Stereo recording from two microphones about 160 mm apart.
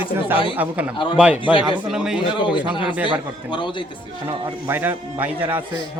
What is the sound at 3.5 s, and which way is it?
Speech, 30° left (ahead or behind).